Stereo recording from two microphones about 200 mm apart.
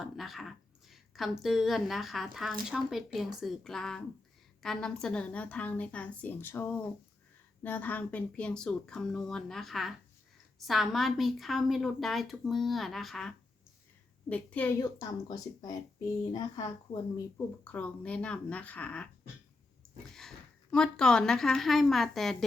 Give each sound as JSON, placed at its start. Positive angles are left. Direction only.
{"t": 0.0, "sound": "a woman's voice", "side_deg": 0}
{"t": 17.6, "sound": "speech", "side_deg": 5}
{"t": 20.1, "sound": "a woman's voice", "side_deg": 0}